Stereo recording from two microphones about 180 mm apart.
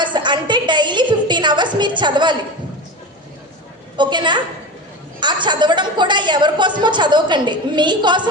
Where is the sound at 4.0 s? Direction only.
25° right (ahead or behind).